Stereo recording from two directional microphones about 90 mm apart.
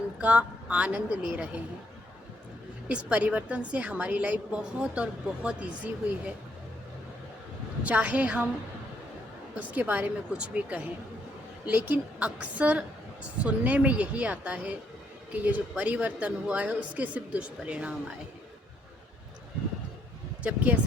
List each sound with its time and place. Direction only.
0.2 s a woman's voice: 15° right (ahead or behind)
2.9 s a woman's voice: 15° right (ahead or behind)
7.9 s a woman's voice: 15° right (ahead or behind)
9.6 s a woman's voice: 15° right (ahead or behind)
20.4 s a woman's voice: 15° right (ahead or behind)